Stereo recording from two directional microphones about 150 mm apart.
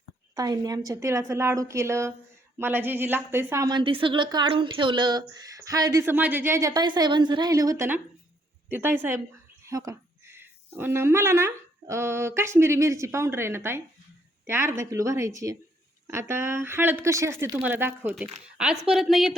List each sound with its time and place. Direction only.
0.3 s a woman's voice: 25° right (ahead or behind); by 19.4 s centre (ahead or behind)